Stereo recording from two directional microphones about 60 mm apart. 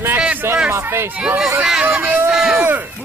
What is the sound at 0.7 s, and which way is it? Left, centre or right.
Speech, right.